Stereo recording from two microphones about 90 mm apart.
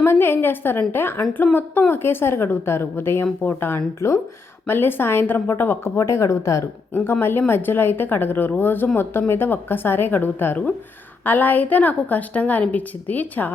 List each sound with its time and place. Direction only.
0.0 s a woman's voice: 25° left (ahead or behind)